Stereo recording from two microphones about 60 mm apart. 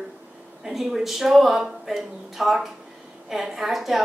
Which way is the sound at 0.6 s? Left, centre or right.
Centre.